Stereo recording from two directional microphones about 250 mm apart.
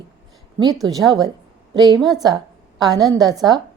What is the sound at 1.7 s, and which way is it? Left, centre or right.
Speech, centre.